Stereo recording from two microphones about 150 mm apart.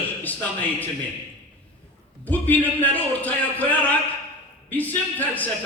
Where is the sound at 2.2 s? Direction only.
10° left (ahead or behind).